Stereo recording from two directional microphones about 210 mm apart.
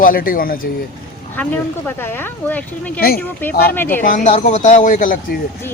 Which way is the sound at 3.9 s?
40° left (ahead or behind).